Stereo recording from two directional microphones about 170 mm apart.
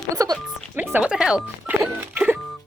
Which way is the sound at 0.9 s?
5° right (ahead or behind).